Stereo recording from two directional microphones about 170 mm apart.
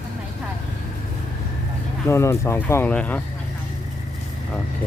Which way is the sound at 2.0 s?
15° left (ahead or behind).